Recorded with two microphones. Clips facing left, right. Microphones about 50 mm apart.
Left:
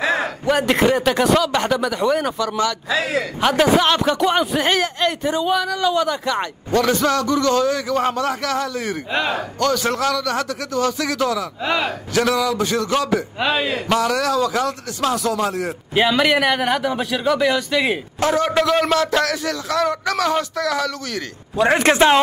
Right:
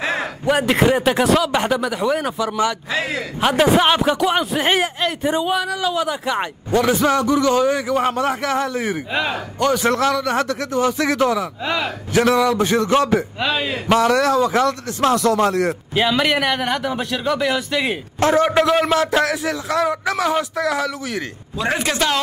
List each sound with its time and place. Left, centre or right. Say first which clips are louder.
0.0 s a sound: left 2 dB; centre
0.9 s speech: even; centre
3.6 s a man's voice: right 2 dB; centre
9.1 s a man's voice: left 3 dB; centre
9.6 s a man's voice: right 3 dB; centre
11.6 s a man's voice: left 1 dB; centre
12.1 s a man's voice: right 4 dB; right
13.4 s a man's voice: left 1 dB; centre
13.9 s a man's voice: right 4 dB; right
15.9 s a man's voice: left 4 dB; centre
18.2 s a man's voice: right 3 dB; right
18.5 s a man's voice: right 1 dB; centre
21.5 s a man's voice: left 6 dB; left
21.9 s a woman's voice: left 8 dB; left